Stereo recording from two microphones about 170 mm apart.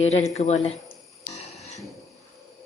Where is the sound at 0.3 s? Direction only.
40° left (ahead or behind).